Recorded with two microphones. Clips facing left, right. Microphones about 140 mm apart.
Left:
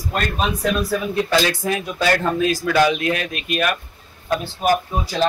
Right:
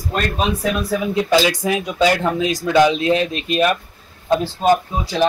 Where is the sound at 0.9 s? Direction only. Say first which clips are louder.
Right 3 dB; 15° right (ahead or behind).